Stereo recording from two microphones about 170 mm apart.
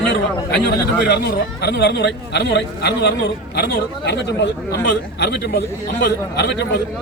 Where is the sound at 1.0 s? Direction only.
75° left (ahead or behind).